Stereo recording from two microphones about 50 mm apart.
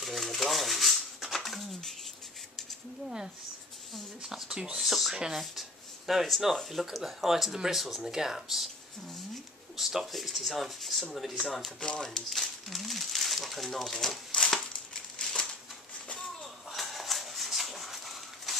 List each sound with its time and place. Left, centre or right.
0.0 s a sound: centre
4.2 s speech: centre
4.7 s a sound: centre
5.1 s speech: centre
9.8 s speech: centre
11.8 s speech: centre
12.3 s speech: centre
15.1 s crumpling: centre
16.7 s a sound: centre